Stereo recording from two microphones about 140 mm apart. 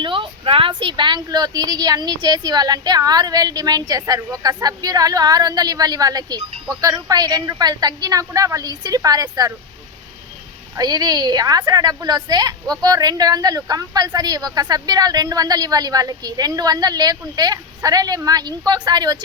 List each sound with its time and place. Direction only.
0.0 s a woman's voice: 40° right (ahead or behind)
10.8 s a woman's voice: 25° right (ahead or behind)